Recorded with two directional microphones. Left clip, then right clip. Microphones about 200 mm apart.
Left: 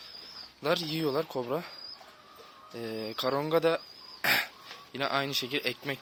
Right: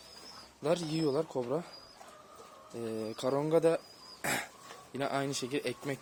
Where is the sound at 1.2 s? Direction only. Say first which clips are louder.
Left 2 dB; 5° left (ahead or behind).